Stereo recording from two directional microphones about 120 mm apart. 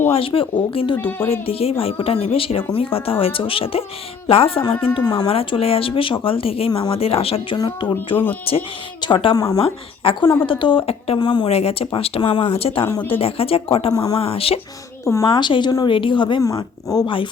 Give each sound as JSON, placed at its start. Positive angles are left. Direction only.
{"t": 0.1, "sound": "speech", "side_deg": 50}
{"t": 7.5, "sound": "speech", "side_deg": 40}
{"t": 8.5, "sound": "speech", "side_deg": 50}
{"t": 9.0, "sound": "speech", "side_deg": 40}
{"t": 9.6, "sound": "speech", "side_deg": 50}
{"t": 11.2, "sound": "speech", "side_deg": 40}
{"t": 11.4, "sound": "speech", "side_deg": 60}
{"t": 13.9, "sound": "speech", "side_deg": 30}
{"t": 14.2, "sound": "speech", "side_deg": 50}
{"t": 15.0, "sound": "a woman's voice", "side_deg": 25}
{"t": 15.3, "sound": "speech", "side_deg": 40}
{"t": 16.4, "sound": "speech", "side_deg": 30}